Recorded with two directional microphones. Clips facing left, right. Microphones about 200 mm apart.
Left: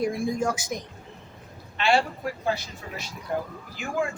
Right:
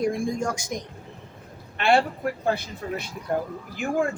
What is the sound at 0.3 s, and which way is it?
Speech, 5° left (ahead or behind).